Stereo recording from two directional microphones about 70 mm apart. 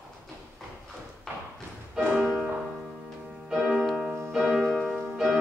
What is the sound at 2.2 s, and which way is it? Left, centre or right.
Music, centre.